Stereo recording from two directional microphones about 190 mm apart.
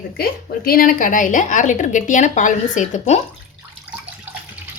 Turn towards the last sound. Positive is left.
turn(degrees=40)  # may be behind; listen again after turning